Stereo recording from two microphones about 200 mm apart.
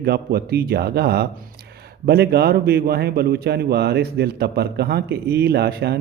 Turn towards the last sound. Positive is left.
turn(degrees=-55)  # may be behind; listen again after turning